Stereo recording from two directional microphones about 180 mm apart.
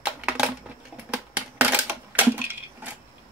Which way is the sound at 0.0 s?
5° right (ahead or behind).